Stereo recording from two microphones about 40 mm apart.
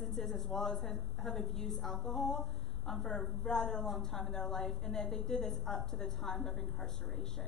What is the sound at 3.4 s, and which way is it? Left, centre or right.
A woman's voice, centre.